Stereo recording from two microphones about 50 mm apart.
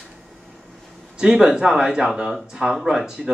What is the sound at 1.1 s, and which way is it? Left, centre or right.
Speech, centre.